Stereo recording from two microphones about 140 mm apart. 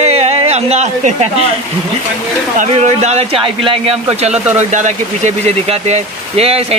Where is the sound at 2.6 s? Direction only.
55° right (ahead or behind).